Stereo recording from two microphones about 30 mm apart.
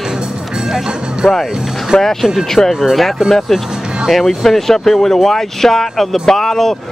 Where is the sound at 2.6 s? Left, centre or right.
Left.